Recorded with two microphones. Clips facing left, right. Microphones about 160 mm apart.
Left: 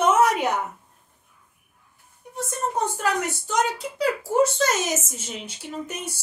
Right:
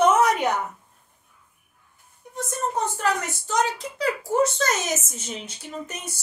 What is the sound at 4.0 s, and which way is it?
Speech, 10° left (ahead or behind).